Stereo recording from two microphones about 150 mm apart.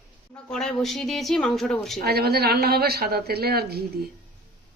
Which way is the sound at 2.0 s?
90° right.